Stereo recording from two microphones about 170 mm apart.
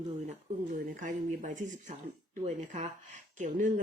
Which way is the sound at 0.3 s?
50° right (ahead or behind).